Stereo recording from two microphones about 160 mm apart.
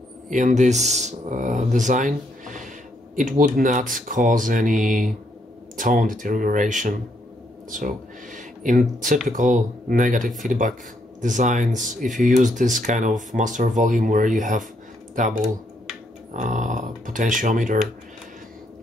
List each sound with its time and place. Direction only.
0.3 s speech: 50° right (ahead or behind)